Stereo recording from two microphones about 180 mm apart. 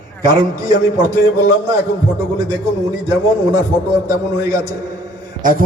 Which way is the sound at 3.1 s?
20° right (ahead or behind).